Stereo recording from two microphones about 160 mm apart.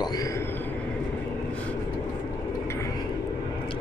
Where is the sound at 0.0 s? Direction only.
25° left (ahead or behind).